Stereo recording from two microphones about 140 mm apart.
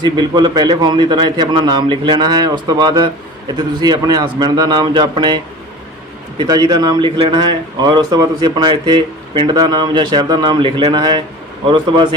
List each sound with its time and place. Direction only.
0.0 s a man's voice: 30° right (ahead or behind)
6.5 s a man's voice: 25° right (ahead or behind)